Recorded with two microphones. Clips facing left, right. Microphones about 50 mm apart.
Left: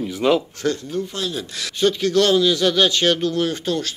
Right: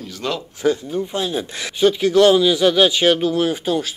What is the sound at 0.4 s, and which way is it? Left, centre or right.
Speech, centre.